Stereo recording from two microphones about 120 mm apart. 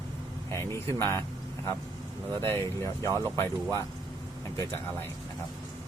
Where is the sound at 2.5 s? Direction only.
25° left (ahead or behind).